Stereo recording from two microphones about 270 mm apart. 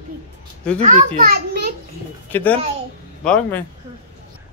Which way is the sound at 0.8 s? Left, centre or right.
Right.